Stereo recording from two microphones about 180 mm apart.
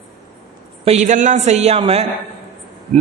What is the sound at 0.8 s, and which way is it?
A man's voice, 40° right (ahead or behind).